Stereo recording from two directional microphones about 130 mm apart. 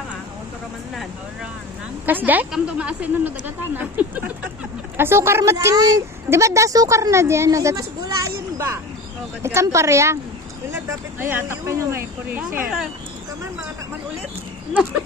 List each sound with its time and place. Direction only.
2.0 s a woman's voice: 15° right (ahead or behind)